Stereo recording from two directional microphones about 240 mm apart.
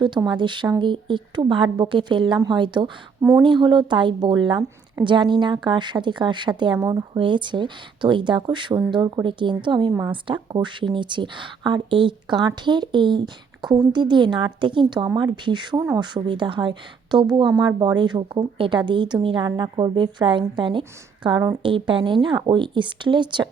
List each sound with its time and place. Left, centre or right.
0.0 s speech: centre